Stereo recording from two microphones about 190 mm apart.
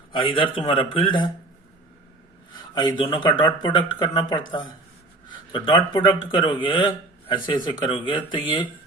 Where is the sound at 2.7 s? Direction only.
25° left (ahead or behind).